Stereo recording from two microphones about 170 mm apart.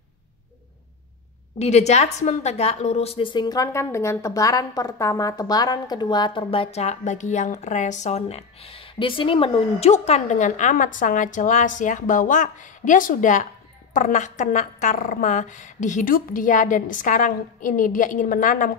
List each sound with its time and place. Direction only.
1.6 s a woman's voice: 40° left (ahead or behind)